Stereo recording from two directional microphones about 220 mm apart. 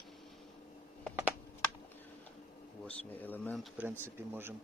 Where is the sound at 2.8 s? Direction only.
10° left (ahead or behind).